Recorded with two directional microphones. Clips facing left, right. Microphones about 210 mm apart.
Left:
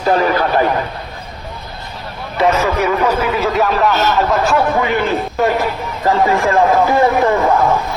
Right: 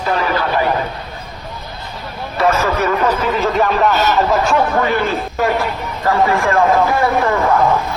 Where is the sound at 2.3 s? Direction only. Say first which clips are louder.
Left 1 dB; 15° left (ahead or behind); by 4.6 s centre (ahead or behind).